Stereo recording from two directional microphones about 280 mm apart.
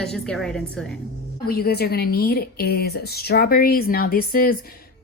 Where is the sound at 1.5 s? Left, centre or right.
Left.